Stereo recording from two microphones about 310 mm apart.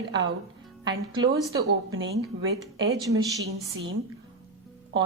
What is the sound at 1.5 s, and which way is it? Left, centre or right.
A woman's voice, right.